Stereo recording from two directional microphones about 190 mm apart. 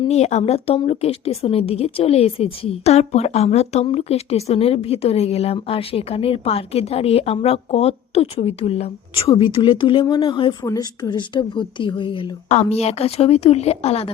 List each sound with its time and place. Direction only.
0.0 s a woman's voice: 35° left (ahead or behind)